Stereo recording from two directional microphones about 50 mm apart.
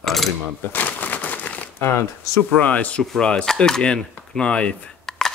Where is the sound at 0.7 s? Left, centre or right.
Left.